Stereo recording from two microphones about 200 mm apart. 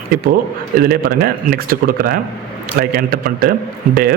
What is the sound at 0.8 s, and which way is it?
Speech, 50° right (ahead or behind).